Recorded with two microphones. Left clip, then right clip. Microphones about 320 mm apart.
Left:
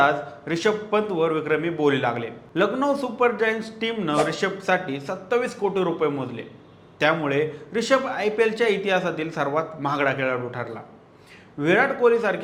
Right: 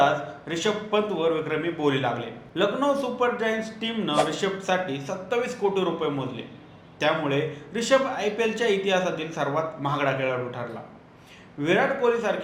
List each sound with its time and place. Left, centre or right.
0.0 s a man's voice: left
11.6 s a man's voice: left